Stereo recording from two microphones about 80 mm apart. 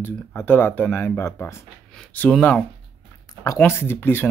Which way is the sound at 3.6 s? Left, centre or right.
Left.